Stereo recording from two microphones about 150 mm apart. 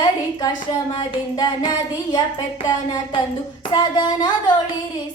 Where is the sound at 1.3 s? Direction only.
25° left (ahead or behind).